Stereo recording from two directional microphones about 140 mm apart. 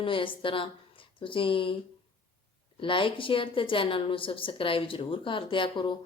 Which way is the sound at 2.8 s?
35° left (ahead or behind).